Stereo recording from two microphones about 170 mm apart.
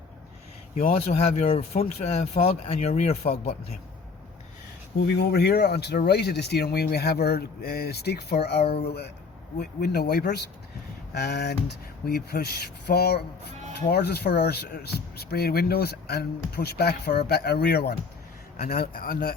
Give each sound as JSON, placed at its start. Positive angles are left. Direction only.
{"t": 1.1, "sound": "speech", "side_deg": 35}
{"t": 4.9, "sound": "speech", "side_deg": 75}